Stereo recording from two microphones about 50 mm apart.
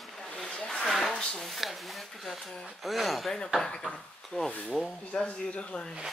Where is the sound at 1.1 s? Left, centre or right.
Centre.